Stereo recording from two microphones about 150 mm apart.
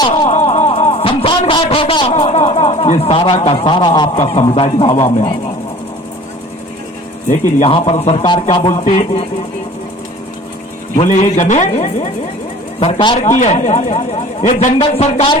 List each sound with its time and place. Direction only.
0.3 s a sound: 50° left (ahead or behind); by 4.2 s 30° left (ahead or behind)
4.2 s speech: 40° left (ahead or behind)
7.6 s speech: 40° left (ahead or behind)
10.9 s speech: 45° left (ahead or behind)
12.8 s speech: 35° left (ahead or behind)
13.2 s speech: 50° left (ahead or behind)
14.8 s speech: 40° left (ahead or behind)